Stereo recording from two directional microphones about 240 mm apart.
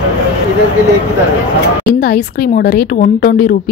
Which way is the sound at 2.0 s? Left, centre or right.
Left.